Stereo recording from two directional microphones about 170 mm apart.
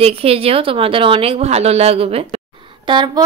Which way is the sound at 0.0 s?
35° right (ahead or behind).